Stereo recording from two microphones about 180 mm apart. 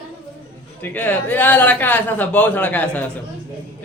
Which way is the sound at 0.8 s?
10° left (ahead or behind).